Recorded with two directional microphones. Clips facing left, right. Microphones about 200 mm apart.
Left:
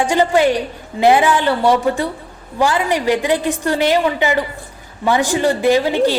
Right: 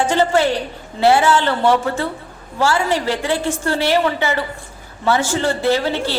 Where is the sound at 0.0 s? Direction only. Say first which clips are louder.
Left 2 dB; 15° left (ahead or behind).